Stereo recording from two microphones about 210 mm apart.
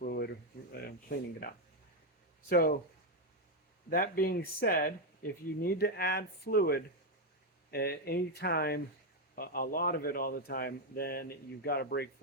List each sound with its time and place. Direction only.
0.0 s a sound: 45° left (ahead or behind)
2.5 s speech: 45° left (ahead or behind)
3.8 s speech: 45° left (ahead or behind)